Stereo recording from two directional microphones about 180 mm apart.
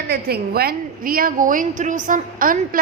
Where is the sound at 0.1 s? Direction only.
60° right (ahead or behind).